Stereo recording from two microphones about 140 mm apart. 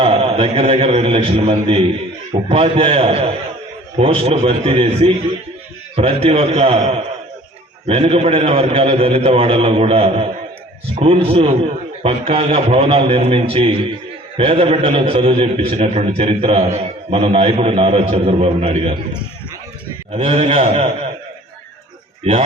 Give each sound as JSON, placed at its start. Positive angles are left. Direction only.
{"t": 0.0, "sound": "a man's voice", "side_deg": -45}
{"t": 20.1, "sound": "a man's voice", "side_deg": -45}
{"t": 22.2, "sound": "speech", "side_deg": -45}